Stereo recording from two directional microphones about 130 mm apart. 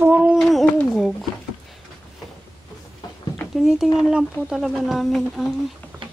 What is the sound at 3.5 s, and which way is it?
Speech, 5° right (ahead or behind).